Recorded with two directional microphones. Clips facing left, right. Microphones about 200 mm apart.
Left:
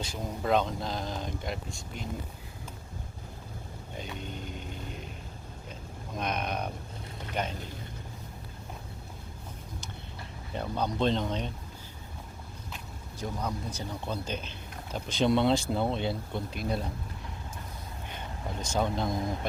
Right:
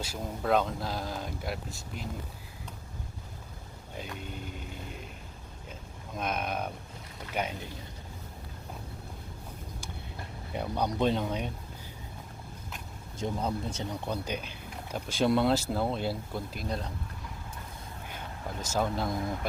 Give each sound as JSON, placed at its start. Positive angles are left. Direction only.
{"t": 0.0, "sound": "speech", "side_deg": -5}
{"t": 6.1, "sound": "speech", "side_deg": -5}
{"t": 10.5, "sound": "speech", "side_deg": -10}
{"t": 13.1, "sound": "speech", "side_deg": -25}
{"t": 14.0, "sound": "speech", "side_deg": -15}
{"t": 18.6, "sound": "speech", "side_deg": -5}